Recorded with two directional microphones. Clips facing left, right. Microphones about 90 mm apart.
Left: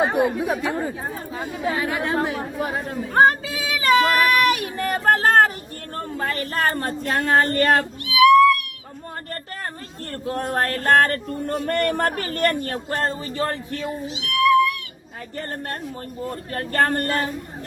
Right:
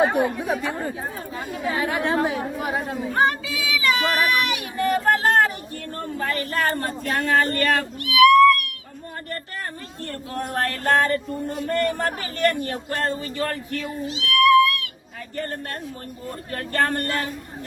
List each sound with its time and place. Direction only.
0.0 s speech: 5° left (ahead or behind)
1.4 s a sound: 25° left (ahead or behind)
1.7 s speech: 30° right (ahead or behind)
2.3 s speech: 5° right (ahead or behind)
3.2 s speech: 40° left (ahead or behind); by 8.5 s 15° left (ahead or behind)
10.2 s speech: 35° left (ahead or behind)
10.9 s speech: 55° left (ahead or behind)
11.6 s speech: 70° left (ahead or behind); by 12.7 s 50° left (ahead or behind)
12.9 s a sound: 30° left (ahead or behind)
14.2 s speech: 10° left (ahead or behind)
14.4 s cat: centre (ahead or behind)
16.6 s speech: 35° left (ahead or behind)